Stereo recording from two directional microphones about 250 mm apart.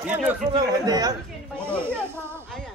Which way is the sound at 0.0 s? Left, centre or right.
Centre.